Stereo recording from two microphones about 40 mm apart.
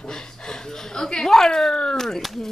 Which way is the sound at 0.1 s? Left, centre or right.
Centre.